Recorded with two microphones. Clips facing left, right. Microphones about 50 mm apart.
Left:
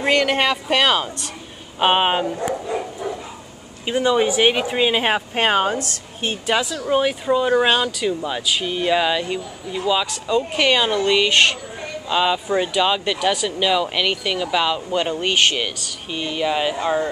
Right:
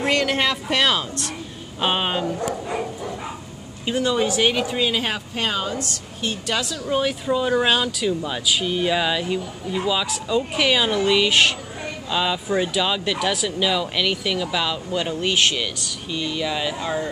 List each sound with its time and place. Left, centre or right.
0.0 s speech: centre
3.8 s speech: centre; by 5.8 s left
6.4 s speech: centre
12.1 s speech: centre
15.5 s speech: left